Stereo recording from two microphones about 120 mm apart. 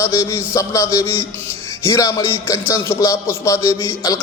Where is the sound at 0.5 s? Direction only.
25° left (ahead or behind).